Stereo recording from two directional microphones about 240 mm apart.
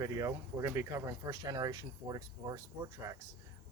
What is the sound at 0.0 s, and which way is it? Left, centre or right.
Speech, centre.